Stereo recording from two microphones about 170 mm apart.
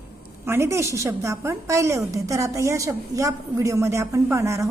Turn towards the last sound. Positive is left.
turn(degrees=-15)  # may be behind; listen again after turning